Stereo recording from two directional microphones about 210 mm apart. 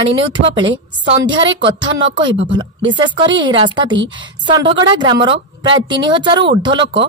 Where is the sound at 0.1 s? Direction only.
25° right (ahead or behind).